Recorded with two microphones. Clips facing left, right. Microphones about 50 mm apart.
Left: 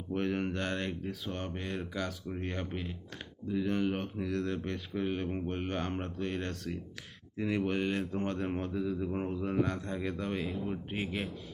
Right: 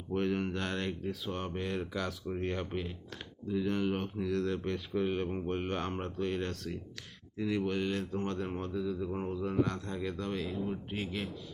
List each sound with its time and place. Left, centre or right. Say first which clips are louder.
0.1 s speech: even; centre
7.3 s speech: left 1 dB; centre